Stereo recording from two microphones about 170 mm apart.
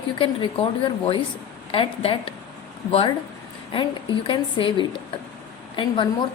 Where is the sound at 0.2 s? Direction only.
30° left (ahead or behind).